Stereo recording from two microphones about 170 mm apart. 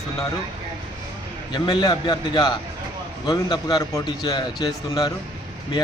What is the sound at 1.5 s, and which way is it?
A man's voice, 30° left (ahead or behind).